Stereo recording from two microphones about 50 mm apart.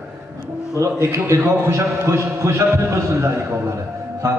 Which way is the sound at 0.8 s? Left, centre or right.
Right.